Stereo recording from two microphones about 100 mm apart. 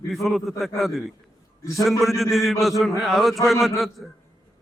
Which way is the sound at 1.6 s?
30° left (ahead or behind).